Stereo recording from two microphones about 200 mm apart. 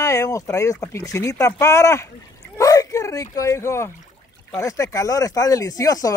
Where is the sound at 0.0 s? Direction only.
15° left (ahead or behind).